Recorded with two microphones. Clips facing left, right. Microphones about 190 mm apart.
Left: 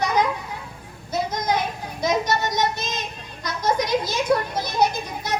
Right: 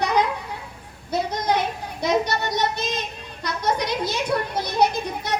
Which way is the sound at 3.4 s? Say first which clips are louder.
Left 1 dB; 65° right (ahead or behind).